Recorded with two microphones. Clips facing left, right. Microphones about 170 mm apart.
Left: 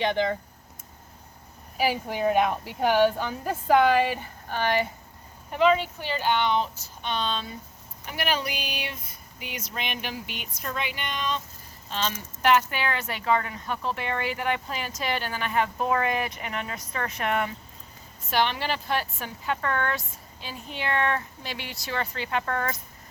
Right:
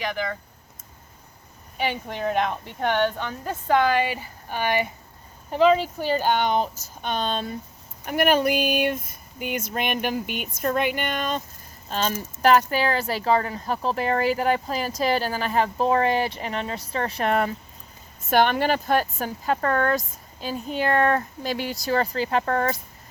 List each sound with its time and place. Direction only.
0.0 s speech: 25° left (ahead or behind)
1.8 s a woman's voice: 5° left (ahead or behind)
4.4 s speech: 15° right (ahead or behind)
5.5 s a woman's voice: 35° right (ahead or behind)
18.3 s speech: 50° right (ahead or behind); by 22.8 s 35° right (ahead or behind)